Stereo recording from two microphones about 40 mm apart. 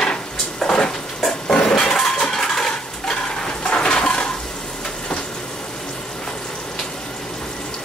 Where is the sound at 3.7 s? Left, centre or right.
Left.